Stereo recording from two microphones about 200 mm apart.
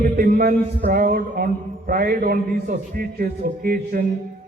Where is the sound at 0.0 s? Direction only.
50° right (ahead or behind).